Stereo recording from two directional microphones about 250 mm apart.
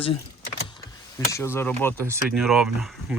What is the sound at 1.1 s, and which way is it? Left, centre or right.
Speech, centre.